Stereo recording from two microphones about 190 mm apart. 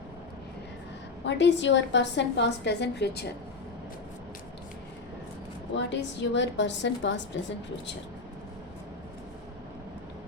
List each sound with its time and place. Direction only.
1.2 s a woman's voice: 70° left (ahead or behind)
5.7 s a woman's voice: 65° left (ahead or behind)